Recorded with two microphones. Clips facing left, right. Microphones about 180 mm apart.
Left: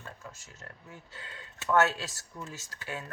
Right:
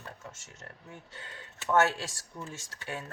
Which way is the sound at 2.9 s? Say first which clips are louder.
Even; 30° right (ahead or behind).